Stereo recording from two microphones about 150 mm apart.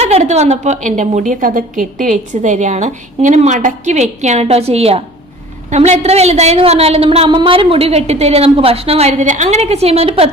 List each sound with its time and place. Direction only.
0.0 s a woman's voice: 45° right (ahead or behind)